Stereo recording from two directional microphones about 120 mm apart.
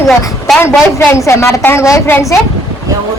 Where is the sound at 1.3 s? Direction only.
20° left (ahead or behind).